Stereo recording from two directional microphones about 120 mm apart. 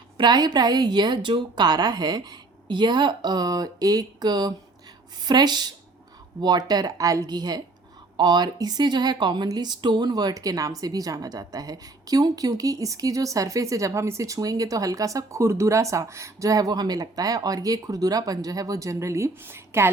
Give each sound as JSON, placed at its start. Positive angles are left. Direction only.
{"t": 0.2, "sound": "a woman's voice", "side_deg": -35}